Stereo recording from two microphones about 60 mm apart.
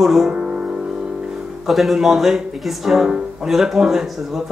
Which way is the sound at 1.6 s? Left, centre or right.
Centre.